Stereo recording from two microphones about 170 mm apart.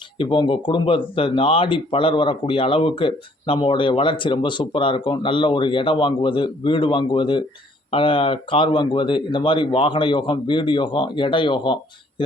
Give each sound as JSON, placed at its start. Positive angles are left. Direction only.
{"t": 0.2, "sound": "speech", "side_deg": 30}